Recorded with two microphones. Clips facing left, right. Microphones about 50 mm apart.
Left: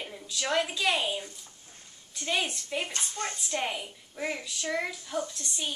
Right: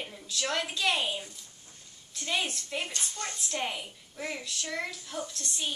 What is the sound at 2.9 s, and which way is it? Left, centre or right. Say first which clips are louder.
Speech: left 3 dB; left.